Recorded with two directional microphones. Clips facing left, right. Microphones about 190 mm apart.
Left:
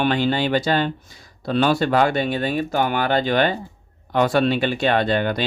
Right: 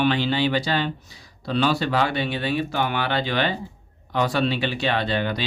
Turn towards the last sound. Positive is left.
turn(degrees=50)  # may be behind; listen again after turning